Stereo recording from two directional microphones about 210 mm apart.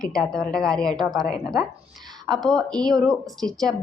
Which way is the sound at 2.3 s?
Centre (ahead or behind).